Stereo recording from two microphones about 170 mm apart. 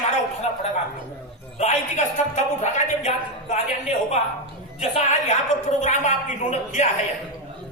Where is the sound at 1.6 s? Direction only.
45° left (ahead or behind).